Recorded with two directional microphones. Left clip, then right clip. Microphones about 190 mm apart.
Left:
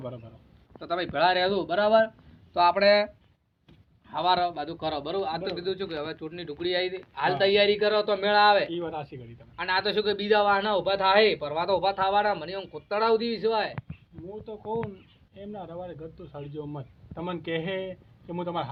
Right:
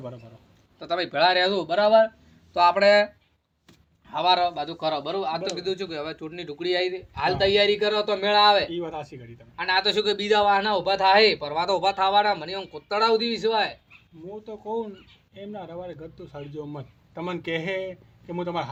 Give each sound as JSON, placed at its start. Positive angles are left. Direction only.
{"t": 0.8, "sound": "a man's voice", "side_deg": -20}
{"t": 4.1, "sound": "a man's voice", "side_deg": -20}
{"t": 8.7, "sound": "speech", "side_deg": 0}
{"t": 9.6, "sound": "a man's voice", "side_deg": -20}